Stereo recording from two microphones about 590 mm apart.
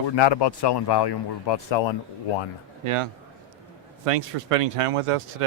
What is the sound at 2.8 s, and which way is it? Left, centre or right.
Speech, right.